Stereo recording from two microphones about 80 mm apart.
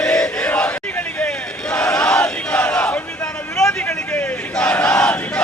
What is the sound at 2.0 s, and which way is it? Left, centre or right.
Battle cry, centre.